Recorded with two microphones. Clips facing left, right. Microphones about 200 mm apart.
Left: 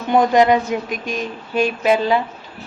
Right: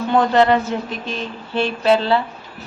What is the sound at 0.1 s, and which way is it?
A woman's voice, 15° left (ahead or behind).